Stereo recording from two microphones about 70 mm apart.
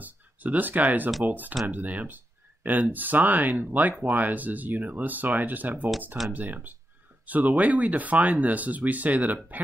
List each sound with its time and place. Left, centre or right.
0.0 s speech: right